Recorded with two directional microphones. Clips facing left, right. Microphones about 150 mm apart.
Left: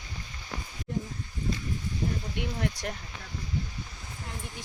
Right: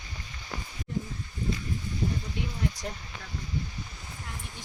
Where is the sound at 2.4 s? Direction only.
70° left (ahead or behind).